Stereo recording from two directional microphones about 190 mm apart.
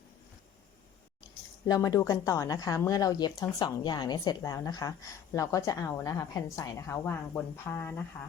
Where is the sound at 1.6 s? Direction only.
20° left (ahead or behind).